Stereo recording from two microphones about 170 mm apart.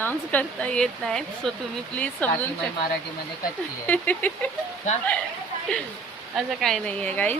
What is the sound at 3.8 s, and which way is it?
Speech, 10° left (ahead or behind).